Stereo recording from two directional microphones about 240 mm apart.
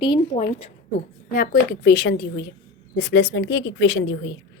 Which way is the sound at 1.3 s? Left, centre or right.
Left.